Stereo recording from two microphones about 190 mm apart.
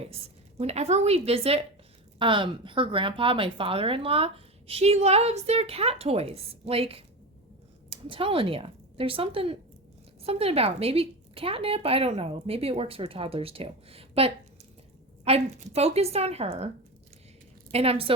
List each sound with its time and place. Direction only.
0.6 s speech: 35° right (ahead or behind)
17.7 s a woman's voice: 30° right (ahead or behind)